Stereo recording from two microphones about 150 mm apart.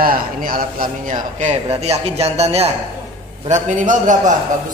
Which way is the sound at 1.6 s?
45° right (ahead or behind).